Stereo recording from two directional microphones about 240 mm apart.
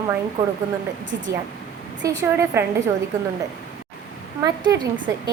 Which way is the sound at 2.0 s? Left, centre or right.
Centre.